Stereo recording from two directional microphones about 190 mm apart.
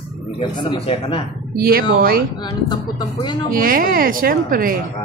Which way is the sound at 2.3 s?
20° left (ahead or behind).